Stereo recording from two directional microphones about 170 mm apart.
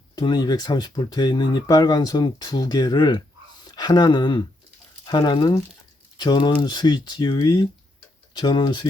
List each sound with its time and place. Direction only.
0.2 s speech: 25° left (ahead or behind)